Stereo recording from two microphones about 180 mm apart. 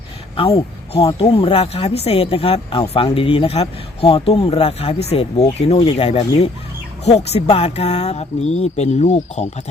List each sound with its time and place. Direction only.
0.3 s speech: 35° left (ahead or behind)